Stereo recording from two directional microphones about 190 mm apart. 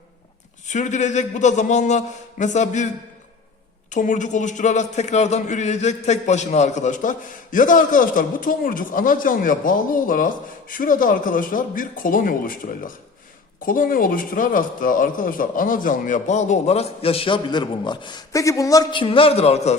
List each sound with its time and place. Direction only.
0.7 s a man's voice: 40° left (ahead or behind)
3.9 s a man's voice: 40° left (ahead or behind)